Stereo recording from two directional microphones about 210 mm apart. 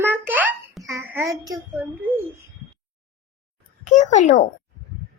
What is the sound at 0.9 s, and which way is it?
A child's voice, 10° right (ahead or behind).